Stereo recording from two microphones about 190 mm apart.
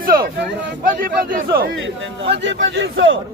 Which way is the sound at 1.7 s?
80° right.